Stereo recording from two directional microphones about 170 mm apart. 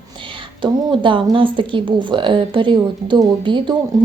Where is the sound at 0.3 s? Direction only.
30° right (ahead or behind).